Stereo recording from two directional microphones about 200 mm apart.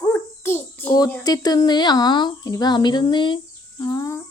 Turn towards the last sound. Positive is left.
turn(degrees=15)  # may be behind; listen again after turning